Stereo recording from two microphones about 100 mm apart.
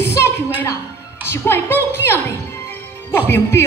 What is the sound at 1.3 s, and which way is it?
A woman's voice, 25° left (ahead or behind).